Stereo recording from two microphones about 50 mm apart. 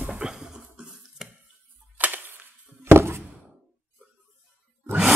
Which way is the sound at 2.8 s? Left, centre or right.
Right.